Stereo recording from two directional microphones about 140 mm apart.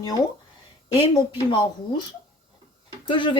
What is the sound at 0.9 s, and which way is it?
Speech, 35° left (ahead or behind).